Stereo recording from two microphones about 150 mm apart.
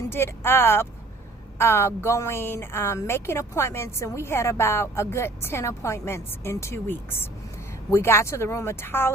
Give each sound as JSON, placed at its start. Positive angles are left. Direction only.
{"t": 0.1, "sound": "a woman's voice", "side_deg": 15}